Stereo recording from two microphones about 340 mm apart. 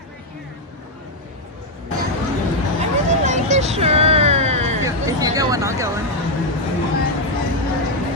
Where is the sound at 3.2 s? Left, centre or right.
Right.